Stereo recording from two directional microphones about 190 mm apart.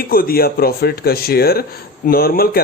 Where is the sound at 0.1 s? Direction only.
50° left (ahead or behind).